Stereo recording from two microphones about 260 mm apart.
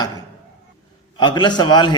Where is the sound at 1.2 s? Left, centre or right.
Centre.